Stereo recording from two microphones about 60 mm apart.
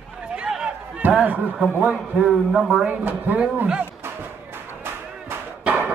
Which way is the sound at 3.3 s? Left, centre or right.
Right.